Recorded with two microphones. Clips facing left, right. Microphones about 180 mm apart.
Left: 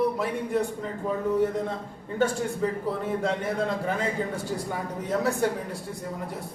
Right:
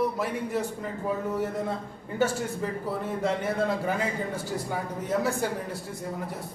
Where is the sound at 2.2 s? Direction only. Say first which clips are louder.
Left 2 dB; 5° right (ahead or behind).